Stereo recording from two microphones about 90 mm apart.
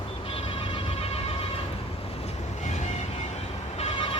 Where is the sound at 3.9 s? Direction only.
85° left.